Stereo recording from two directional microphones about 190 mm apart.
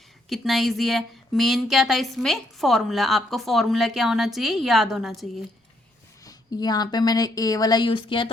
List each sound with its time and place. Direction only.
0.3 s speech: centre (ahead or behind)
6.2 s speech: 20° left (ahead or behind)